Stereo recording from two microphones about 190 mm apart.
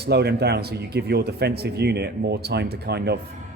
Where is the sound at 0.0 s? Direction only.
60° right (ahead or behind).